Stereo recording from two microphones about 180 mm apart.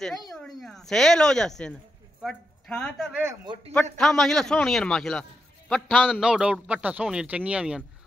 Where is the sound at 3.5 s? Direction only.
25° right (ahead or behind).